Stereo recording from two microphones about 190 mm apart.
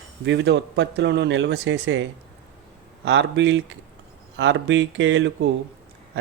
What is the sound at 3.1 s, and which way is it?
Speech, 70° right (ahead or behind).